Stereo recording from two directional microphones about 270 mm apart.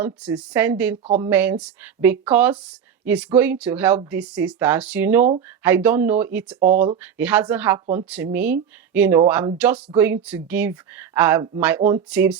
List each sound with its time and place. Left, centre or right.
0.0 s a woman's voice: centre
1.0 s speech: right
1.3 s speech: centre
6.6 s speech: right
7.0 s a woman's voice: centre